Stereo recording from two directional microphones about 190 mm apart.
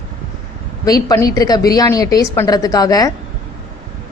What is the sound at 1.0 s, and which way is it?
A woman's voice, 20° left (ahead or behind).